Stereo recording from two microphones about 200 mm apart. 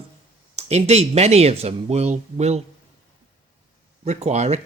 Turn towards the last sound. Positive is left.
turn(degrees=-35)  # may be behind; listen again after turning